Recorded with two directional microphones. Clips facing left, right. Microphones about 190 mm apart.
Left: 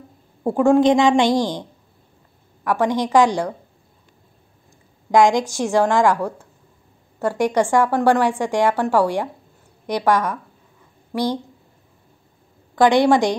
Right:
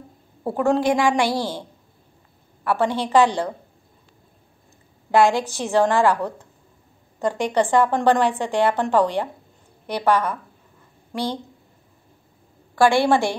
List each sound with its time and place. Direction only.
0.4 s a woman's voice: 15° left (ahead or behind)
5.1 s a woman's voice: 15° left (ahead or behind)
12.7 s a woman's voice: 20° left (ahead or behind)